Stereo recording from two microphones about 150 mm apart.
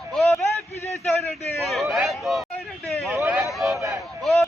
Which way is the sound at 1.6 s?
Centre (ahead or behind).